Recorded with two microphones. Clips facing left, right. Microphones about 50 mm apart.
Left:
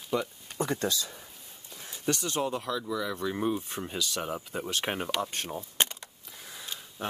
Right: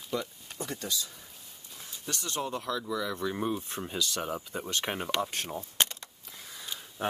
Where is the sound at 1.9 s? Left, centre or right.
Left.